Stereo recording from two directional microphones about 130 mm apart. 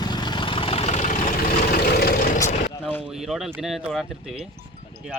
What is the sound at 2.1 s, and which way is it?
Vehicle, 90° left.